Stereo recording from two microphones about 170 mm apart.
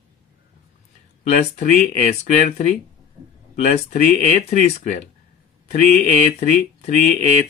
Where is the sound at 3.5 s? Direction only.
45° left (ahead or behind).